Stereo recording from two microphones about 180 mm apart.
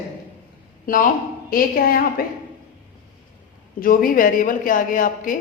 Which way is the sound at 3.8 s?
50° left (ahead or behind).